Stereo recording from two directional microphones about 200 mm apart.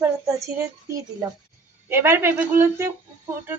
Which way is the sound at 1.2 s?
15° right (ahead or behind).